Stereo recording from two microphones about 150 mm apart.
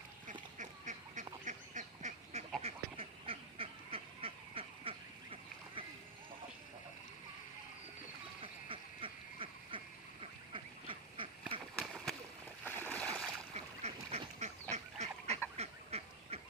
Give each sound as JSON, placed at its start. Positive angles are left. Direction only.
{"t": 0.6, "sound": "duck", "side_deg": -55}
{"t": 2.6, "sound": "duck", "side_deg": -40}
{"t": 8.4, "sound": "quack", "side_deg": -35}
{"t": 12.6, "sound": "a sound", "side_deg": 10}
{"t": 13.5, "sound": "duck", "side_deg": -45}